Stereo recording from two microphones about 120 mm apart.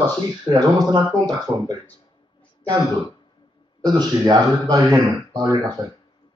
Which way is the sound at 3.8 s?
35° right (ahead or behind).